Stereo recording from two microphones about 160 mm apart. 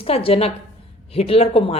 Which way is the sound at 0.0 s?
35° left (ahead or behind).